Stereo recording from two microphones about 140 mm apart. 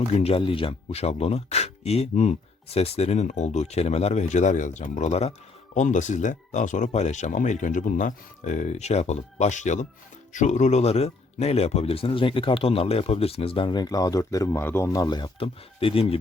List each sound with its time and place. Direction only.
0.1 s speech: 45° left (ahead or behind)